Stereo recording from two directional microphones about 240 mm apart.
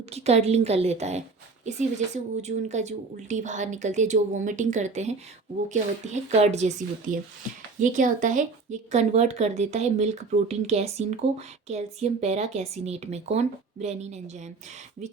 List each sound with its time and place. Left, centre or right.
0.1 s speech: right
2.4 s speech: right